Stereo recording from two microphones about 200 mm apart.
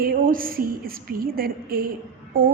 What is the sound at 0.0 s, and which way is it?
A woman's voice, 45° right (ahead or behind).